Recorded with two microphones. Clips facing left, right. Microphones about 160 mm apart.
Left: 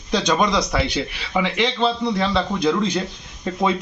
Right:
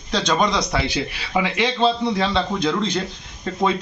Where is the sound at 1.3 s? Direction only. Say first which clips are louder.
Even; 5° right (ahead or behind).